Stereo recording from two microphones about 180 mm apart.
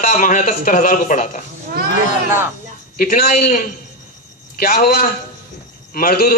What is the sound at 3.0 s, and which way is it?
A man's voice, 50° left (ahead or behind).